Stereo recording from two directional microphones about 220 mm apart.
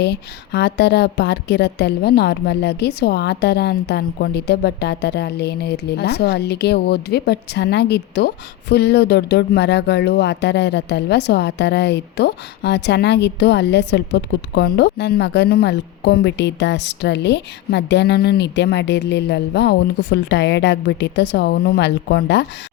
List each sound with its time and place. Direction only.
0.0 s a woman's voice: 50° left (ahead or behind)